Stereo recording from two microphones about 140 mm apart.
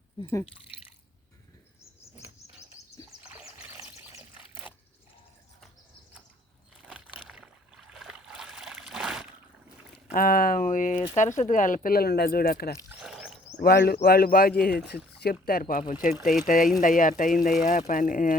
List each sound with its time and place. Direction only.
4.2 s a sound: 10° right (ahead or behind)
6.8 s a sound: 5° right (ahead or behind)
10.2 s speech: 90° left; by 10.9 s 70° left (ahead or behind)
10.9 s speech: 45° left (ahead or behind)
11.2 s speech: 60° left (ahead or behind); by 12.7 s 90° left
13.0 s wild animals: centre (ahead or behind)
13.6 s speech: 90° left
15.9 s speech: 70° left (ahead or behind)